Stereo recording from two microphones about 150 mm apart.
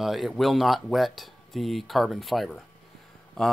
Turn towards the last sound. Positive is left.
turn(degrees=5)  # may be behind; listen again after turning